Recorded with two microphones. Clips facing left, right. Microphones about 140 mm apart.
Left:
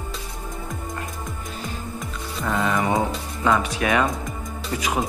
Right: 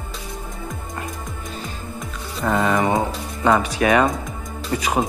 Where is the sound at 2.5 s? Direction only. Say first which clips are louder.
Right 4 dB; 40° right (ahead or behind).